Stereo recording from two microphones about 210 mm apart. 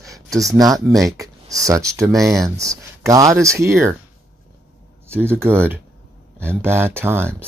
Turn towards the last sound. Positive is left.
turn(degrees=-10)  # may be behind; listen again after turning